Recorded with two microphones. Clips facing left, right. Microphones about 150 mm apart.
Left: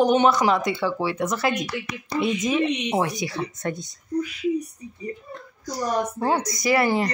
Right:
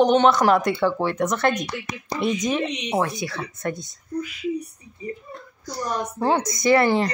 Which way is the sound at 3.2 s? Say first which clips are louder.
Left 1 dB; 20° left (ahead or behind).